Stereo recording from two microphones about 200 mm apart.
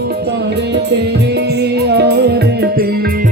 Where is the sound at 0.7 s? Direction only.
55° right (ahead or behind).